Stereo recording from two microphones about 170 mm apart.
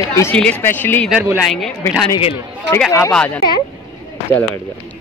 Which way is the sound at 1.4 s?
Centre (ahead or behind).